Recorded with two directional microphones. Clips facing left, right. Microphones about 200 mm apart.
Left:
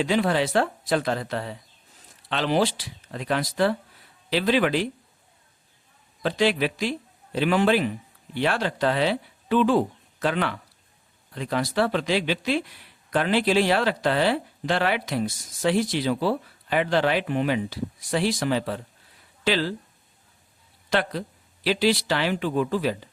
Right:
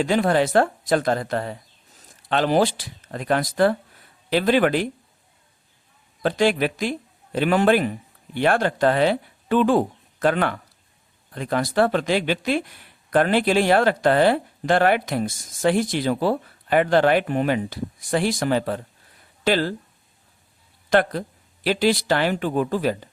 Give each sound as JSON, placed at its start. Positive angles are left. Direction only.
{"t": 0.0, "sound": "speech", "side_deg": -50}
{"t": 6.2, "sound": "speech", "side_deg": -50}
{"t": 20.9, "sound": "speech", "side_deg": -50}